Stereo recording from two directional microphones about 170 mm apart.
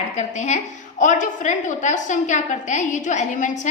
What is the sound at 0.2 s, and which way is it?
A woman's voice, 40° left (ahead or behind).